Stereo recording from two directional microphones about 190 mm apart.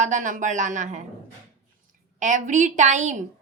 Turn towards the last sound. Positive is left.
turn(degrees=-40)  # may be behind; listen again after turning